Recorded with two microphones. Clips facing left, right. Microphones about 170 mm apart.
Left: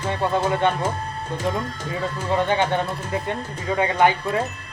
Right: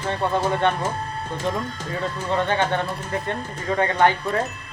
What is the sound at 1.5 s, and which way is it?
Speech, centre (ahead or behind).